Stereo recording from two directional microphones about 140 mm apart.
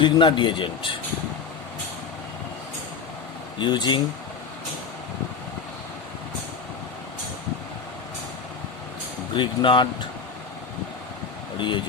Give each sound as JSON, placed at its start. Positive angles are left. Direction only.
{"t": 0.0, "sound": "speech", "side_deg": 35}
{"t": 3.6, "sound": "speech", "side_deg": 30}
{"t": 9.3, "sound": "speech", "side_deg": 35}
{"t": 11.5, "sound": "speech", "side_deg": 35}